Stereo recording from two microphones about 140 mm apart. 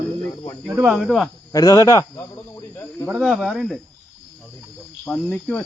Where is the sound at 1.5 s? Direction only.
25° left (ahead or behind).